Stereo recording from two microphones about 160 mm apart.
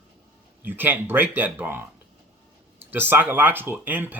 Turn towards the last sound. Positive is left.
turn(degrees=-10)  # may be behind; listen again after turning